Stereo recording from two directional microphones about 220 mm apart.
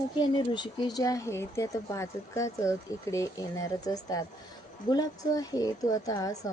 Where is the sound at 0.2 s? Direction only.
20° left (ahead or behind).